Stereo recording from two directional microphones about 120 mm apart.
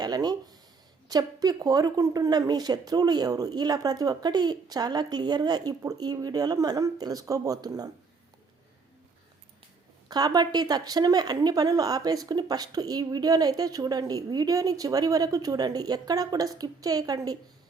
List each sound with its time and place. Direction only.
0.0 s speech: 35° right (ahead or behind)
10.1 s speech: 35° right (ahead or behind)